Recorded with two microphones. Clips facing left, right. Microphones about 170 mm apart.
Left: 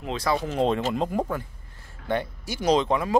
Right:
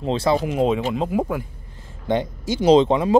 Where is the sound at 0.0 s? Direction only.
30° right (ahead or behind).